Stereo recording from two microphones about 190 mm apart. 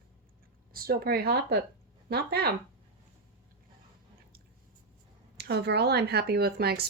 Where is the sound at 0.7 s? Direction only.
55° right (ahead or behind).